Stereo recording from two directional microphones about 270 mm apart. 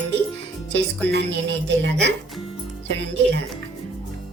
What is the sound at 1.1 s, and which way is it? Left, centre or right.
Speech, right.